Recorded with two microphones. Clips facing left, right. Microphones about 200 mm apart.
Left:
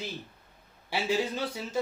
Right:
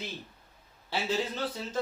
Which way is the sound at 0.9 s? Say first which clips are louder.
Left 2 dB; 10° left (ahead or behind).